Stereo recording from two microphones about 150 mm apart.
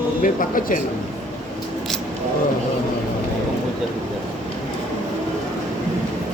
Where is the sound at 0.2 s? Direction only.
65° left (ahead or behind).